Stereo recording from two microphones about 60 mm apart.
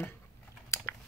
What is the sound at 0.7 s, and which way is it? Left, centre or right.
Chewing, left.